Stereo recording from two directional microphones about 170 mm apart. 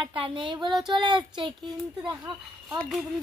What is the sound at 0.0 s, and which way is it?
Speech, 30° right (ahead or behind).